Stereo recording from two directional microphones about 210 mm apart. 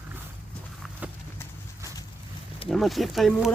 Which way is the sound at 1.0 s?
5° right (ahead or behind).